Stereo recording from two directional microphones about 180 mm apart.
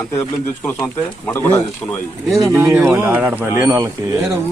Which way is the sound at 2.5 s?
15° right (ahead or behind).